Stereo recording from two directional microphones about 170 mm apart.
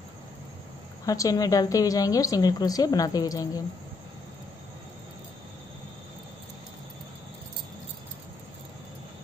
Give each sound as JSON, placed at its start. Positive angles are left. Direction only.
{"t": 1.0, "sound": "a woman's voice", "side_deg": 20}